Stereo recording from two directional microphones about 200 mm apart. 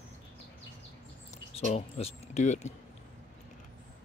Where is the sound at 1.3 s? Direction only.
35° left (ahead or behind).